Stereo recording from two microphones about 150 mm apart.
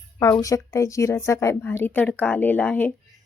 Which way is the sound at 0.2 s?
25° left (ahead or behind).